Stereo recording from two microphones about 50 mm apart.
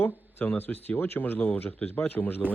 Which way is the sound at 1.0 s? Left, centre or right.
Left.